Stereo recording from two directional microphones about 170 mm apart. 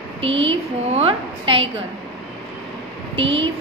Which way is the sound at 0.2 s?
35° right (ahead or behind).